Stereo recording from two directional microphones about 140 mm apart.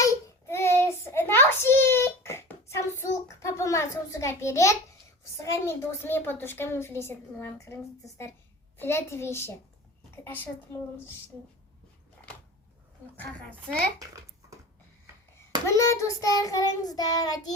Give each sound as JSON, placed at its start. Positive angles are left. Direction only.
{"t": 0.0, "sound": "child singing", "side_deg": 20}
{"t": 5.4, "sound": "a woman's voice", "side_deg": 20}
{"t": 8.8, "sound": "child singing", "side_deg": 20}
{"t": 10.2, "sound": "a woman's voice", "side_deg": 15}
{"t": 15.6, "sound": "child singing", "side_deg": 20}